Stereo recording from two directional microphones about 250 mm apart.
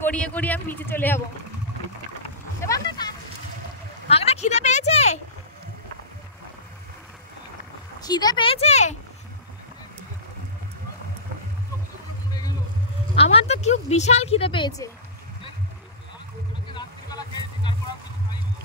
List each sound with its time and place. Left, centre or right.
0.0 s speech: centre
2.6 s a sound: centre
4.1 s a woman's voice: left
8.0 s speech: centre
13.1 s speech: left
16.7 s vehicle: centre